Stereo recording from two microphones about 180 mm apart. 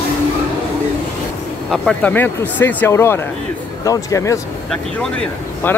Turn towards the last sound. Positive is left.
turn(degrees=10)  # may be behind; listen again after turning